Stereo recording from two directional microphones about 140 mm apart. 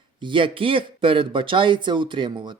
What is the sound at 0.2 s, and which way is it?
Speech, 35° right (ahead or behind).